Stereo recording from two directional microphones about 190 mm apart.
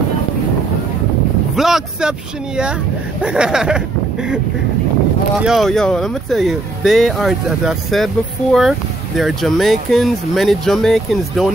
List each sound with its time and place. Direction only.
1.6 s speech: 5° right (ahead or behind)
5.4 s speech: centre (ahead or behind)